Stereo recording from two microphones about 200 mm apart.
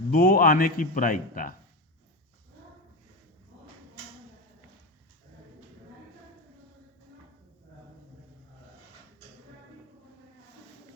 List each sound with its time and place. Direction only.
0.1 s a man's voice: 50° left (ahead or behind)